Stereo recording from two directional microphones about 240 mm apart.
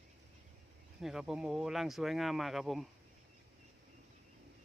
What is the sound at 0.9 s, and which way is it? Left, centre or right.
Speech, centre.